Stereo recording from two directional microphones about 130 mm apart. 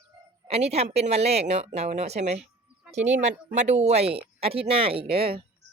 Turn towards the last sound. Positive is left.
turn(degrees=-45)  # may be behind; listen again after turning